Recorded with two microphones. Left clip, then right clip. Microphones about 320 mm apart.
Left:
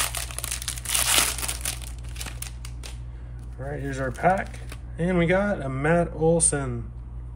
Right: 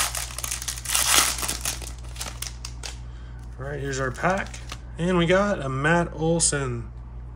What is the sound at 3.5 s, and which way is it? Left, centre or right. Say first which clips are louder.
Speech: right 2 dB; centre.